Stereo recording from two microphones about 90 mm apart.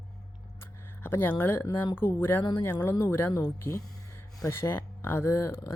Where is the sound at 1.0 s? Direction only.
20° left (ahead or behind).